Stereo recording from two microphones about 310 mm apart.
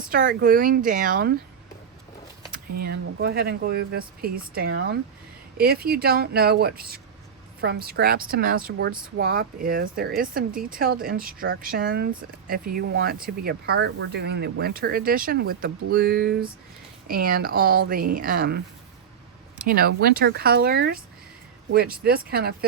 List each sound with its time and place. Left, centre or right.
0.1 s speech: right
2.8 s speech: right